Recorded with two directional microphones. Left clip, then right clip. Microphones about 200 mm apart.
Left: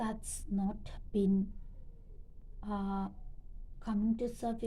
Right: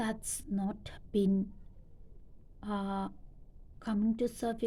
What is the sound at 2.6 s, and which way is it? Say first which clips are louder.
A woman's voice: right 2 dB; 40° right (ahead or behind).